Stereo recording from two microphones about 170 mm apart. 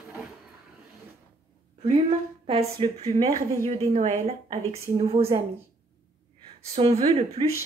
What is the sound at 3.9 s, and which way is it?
A woman's voice, 45° right (ahead or behind).